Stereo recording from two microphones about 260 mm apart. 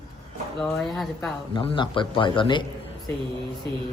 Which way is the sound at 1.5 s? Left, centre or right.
Centre.